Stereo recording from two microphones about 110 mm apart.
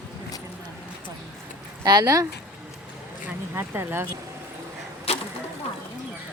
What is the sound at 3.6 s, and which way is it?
Speech, 20° right (ahead or behind).